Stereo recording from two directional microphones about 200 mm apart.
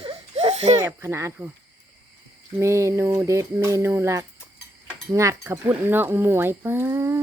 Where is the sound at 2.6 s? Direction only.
15° right (ahead or behind).